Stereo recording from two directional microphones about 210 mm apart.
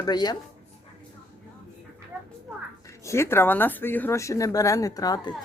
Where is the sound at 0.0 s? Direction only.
20° left (ahead or behind).